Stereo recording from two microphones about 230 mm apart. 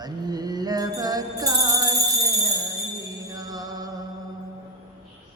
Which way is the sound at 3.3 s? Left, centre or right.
Centre.